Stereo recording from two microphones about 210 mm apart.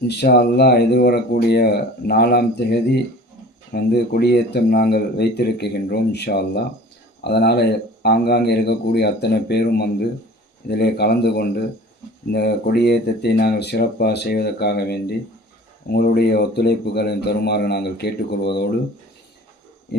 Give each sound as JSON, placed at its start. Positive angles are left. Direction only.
{"t": 0.1, "sound": "speech", "side_deg": 50}